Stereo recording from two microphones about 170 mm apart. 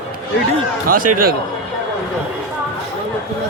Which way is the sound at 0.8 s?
60° right (ahead or behind).